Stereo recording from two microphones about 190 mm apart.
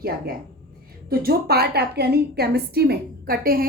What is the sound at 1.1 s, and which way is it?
A woman's voice, 55° right (ahead or behind).